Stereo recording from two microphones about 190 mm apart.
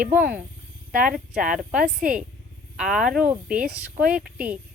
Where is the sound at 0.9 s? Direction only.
50° right (ahead or behind).